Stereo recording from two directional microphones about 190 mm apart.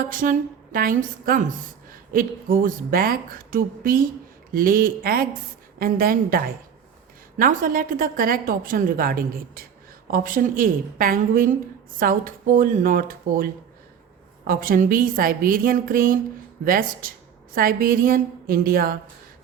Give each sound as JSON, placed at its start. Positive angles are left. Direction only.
{"t": 0.0, "sound": "a woman's voice", "side_deg": -45}